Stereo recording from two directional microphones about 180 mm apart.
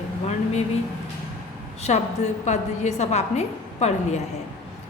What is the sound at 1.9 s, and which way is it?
A woman's voice, 40° left (ahead or behind).